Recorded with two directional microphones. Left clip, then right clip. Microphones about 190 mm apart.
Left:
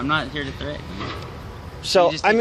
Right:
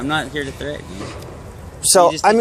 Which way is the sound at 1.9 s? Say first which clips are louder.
Right 4 dB; 30° right (ahead or behind).